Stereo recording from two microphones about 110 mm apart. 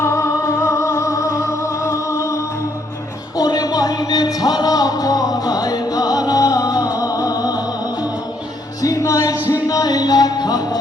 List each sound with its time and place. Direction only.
0.0 s music: 25° left (ahead or behind)
8.8 s music: 30° left (ahead or behind)